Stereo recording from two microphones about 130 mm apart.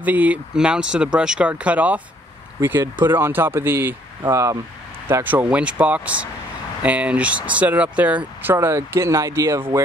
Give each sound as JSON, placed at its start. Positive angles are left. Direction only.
{"t": 0.0, "sound": "speech", "side_deg": -10}
{"t": 5.2, "sound": "speech", "side_deg": -15}